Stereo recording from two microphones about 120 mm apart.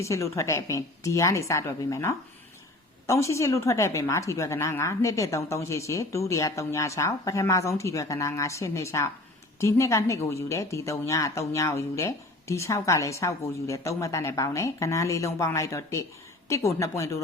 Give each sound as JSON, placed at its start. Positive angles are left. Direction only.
{"t": 0.0, "sound": "a woman's voice", "side_deg": 25}